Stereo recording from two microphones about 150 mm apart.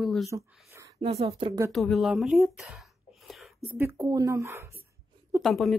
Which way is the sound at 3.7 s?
15° right (ahead or behind).